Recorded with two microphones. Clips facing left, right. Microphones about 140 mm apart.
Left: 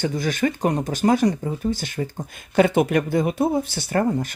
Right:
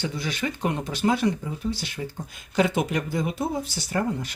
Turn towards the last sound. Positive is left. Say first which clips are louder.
# left 5 dB
turn(degrees=50)  # may be behind; listen again after turning